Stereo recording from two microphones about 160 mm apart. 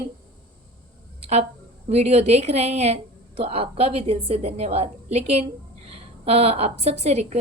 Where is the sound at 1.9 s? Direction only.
40° right (ahead or behind).